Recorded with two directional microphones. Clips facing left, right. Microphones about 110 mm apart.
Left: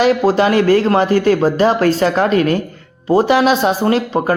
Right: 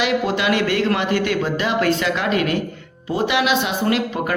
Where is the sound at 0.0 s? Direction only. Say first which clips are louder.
Left 7 dB; 40° left (ahead or behind).